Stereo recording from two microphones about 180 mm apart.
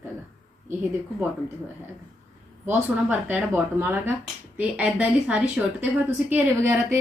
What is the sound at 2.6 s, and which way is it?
A woman's voice, 10° right (ahead or behind).